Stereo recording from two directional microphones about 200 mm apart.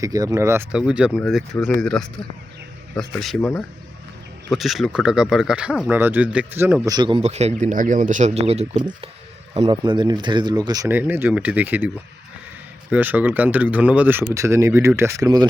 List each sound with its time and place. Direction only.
0.0 s speech: 15° right (ahead or behind); by 2.0 s 5° left (ahead or behind)
3.2 s speech: centre (ahead or behind)
4.5 s speech: centre (ahead or behind)
6.8 s a man's voice: 20° right (ahead or behind)
8.8 s speech: 20° right (ahead or behind)
12.9 s speech: 10° right (ahead or behind)